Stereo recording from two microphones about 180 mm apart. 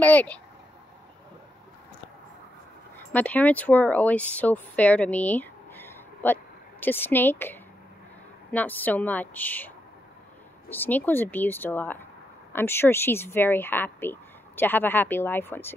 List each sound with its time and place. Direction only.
0.0 s a woman's voice: 10° left (ahead or behind)
3.1 s a woman's voice: 10° left (ahead or behind)
10.7 s a woman's voice: 10° left (ahead or behind)